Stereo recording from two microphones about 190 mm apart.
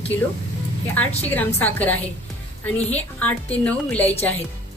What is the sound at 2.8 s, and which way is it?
Speech, 35° left (ahead or behind).